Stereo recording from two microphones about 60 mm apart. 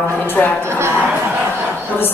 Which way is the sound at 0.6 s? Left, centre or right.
Right.